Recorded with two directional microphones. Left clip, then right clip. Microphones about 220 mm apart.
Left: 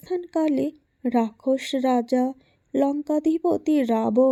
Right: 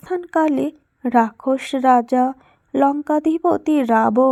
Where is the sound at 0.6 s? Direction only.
Centre (ahead or behind).